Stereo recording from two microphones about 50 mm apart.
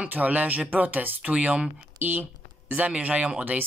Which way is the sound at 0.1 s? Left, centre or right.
Right.